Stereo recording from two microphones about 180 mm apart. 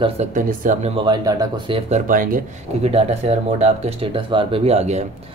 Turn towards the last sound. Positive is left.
turn(degrees=-40)  # may be behind; listen again after turning